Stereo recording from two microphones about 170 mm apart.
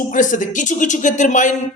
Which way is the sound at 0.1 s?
50° left (ahead or behind).